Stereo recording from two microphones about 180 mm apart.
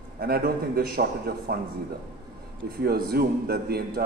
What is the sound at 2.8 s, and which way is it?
A man's voice, 60° right (ahead or behind).